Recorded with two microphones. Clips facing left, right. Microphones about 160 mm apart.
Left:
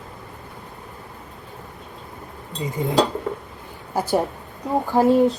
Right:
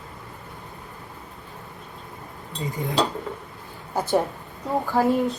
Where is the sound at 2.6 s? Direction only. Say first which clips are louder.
Left 4 dB; 20° left (ahead or behind).